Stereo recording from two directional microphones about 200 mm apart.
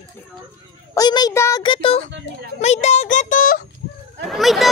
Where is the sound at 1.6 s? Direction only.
25° left (ahead or behind); by 3.6 s 45° left (ahead or behind).